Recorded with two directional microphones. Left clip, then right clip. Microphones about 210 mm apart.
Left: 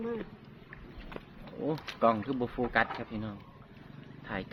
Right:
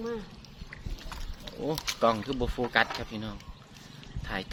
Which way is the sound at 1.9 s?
10° right (ahead or behind).